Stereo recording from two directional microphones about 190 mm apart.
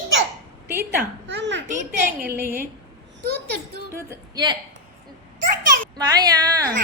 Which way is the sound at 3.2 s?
60° right (ahead or behind).